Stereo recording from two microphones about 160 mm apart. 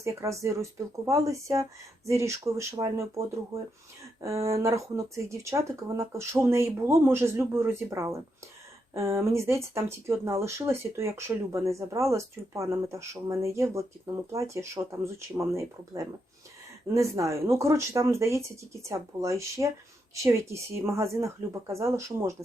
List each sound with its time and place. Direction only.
0.0 s speech: 20° right (ahead or behind)